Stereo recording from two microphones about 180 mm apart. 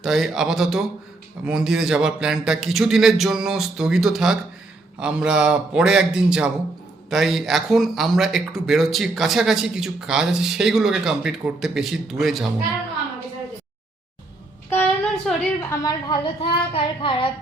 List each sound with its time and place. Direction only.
0.0 s speech: centre (ahead or behind)
14.7 s a sound: 5° left (ahead or behind)
15.7 s a woman's voice: 20° left (ahead or behind)